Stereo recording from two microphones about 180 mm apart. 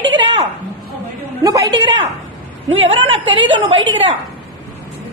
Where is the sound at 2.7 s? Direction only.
90° right.